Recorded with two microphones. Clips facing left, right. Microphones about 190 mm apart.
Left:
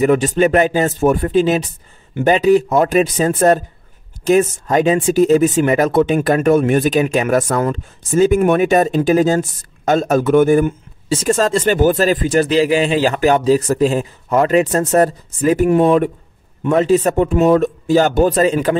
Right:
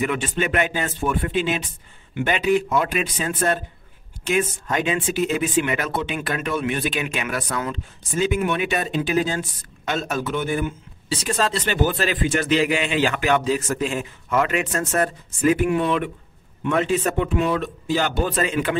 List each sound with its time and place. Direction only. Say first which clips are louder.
0.0 s speech: left 10 dB; 40° left (ahead or behind)